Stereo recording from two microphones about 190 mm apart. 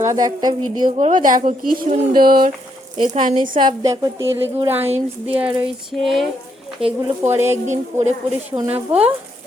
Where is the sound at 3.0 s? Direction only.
35° right (ahead or behind).